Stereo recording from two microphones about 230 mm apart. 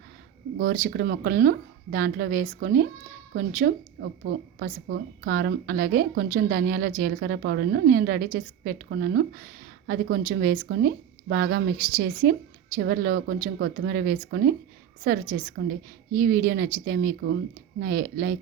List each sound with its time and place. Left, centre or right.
0.6 s a woman's voice: right